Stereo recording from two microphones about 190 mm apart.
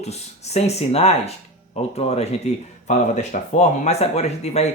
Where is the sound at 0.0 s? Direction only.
35° left (ahead or behind).